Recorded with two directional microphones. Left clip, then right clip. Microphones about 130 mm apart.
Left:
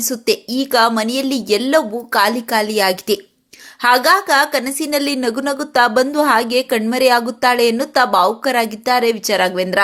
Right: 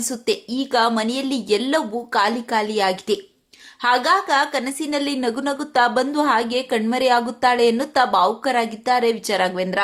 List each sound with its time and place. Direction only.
0.0 s a woman's voice: 20° left (ahead or behind)